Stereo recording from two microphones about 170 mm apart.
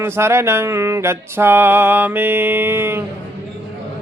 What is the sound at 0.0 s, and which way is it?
Music, 15° right (ahead or behind).